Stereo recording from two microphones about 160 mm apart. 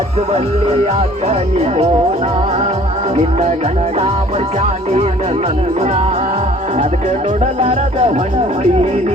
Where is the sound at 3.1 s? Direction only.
40° right (ahead or behind).